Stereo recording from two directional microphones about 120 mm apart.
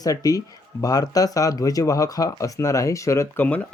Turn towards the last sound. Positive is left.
turn(degrees=15)  # may be behind; listen again after turning